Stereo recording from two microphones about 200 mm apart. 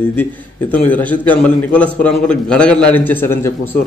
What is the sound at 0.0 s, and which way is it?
Speech, 10° left (ahead or behind).